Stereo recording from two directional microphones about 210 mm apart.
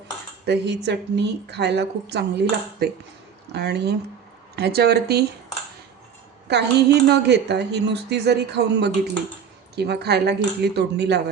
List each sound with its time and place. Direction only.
0.4 s a woman's voice: 55° right (ahead or behind)
3.5 s a woman's voice: 55° right (ahead or behind)
6.5 s a woman's voice: 50° right (ahead or behind)